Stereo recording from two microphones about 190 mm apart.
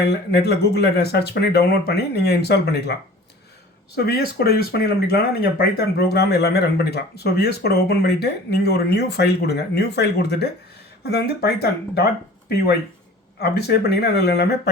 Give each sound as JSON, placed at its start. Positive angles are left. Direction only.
{"t": 0.0, "sound": "speech", "side_deg": 60}
{"t": 3.9, "sound": "speech", "side_deg": 55}
{"t": 13.6, "sound": "speech", "side_deg": 60}